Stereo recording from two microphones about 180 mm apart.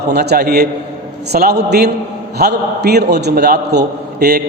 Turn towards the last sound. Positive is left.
turn(degrees=-65)  # may be behind; listen again after turning